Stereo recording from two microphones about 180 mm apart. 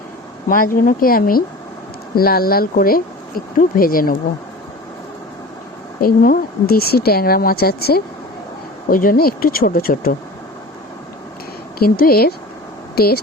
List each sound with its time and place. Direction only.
0.4 s speech: 50° left (ahead or behind)
6.0 s speech: 55° left (ahead or behind)
11.8 s speech: 55° left (ahead or behind)